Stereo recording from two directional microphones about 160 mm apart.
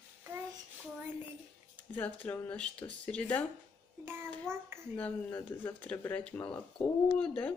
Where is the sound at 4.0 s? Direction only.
15° right (ahead or behind).